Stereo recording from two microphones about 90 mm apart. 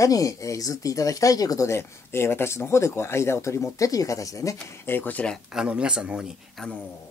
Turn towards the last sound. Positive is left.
turn(degrees=-10)  # may be behind; listen again after turning